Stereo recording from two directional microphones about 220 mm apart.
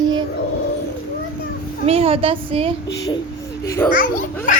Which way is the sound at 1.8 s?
25° right (ahead or behind).